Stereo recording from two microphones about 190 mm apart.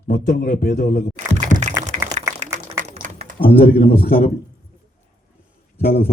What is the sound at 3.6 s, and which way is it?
Speech, 55° left (ahead or behind).